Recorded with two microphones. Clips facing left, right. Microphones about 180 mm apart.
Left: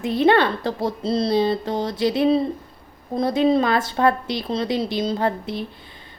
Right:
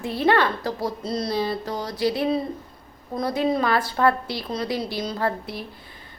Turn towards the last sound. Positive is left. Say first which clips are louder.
# left 4 dB
turn(degrees=20)  # may be behind; listen again after turning